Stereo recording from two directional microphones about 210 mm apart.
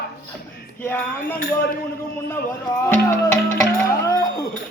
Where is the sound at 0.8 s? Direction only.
10° left (ahead or behind).